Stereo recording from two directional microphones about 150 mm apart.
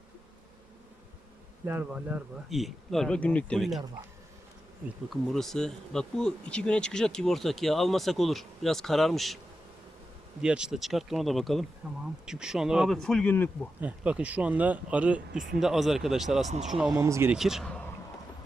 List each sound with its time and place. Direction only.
1.6 s speech: 10° right (ahead or behind)
5.0 s speech: centre (ahead or behind)
10.4 s speech: 5° right (ahead or behind)
13.8 s speech: 10° right (ahead or behind)
16.9 s speech: 20° right (ahead or behind)
17.3 s speech: 5° right (ahead or behind)